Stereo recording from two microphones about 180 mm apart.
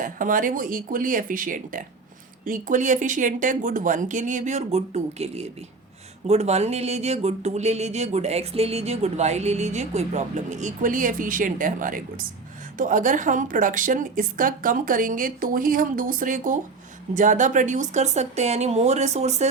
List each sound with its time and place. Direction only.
0.0 s a woman's voice: 50° right (ahead or behind)